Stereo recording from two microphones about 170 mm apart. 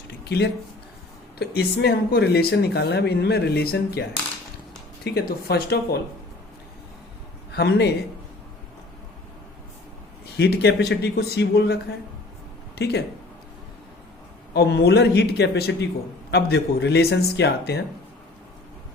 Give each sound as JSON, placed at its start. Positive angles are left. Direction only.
{"t": 0.3, "sound": "speech", "side_deg": 75}
{"t": 5.0, "sound": "speech", "side_deg": 70}
{"t": 7.5, "sound": "speech", "side_deg": 75}
{"t": 10.3, "sound": "speech", "side_deg": 75}
{"t": 14.5, "sound": "speech", "side_deg": 70}